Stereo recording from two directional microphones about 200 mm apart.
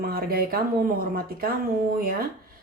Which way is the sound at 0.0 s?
45° right (ahead or behind).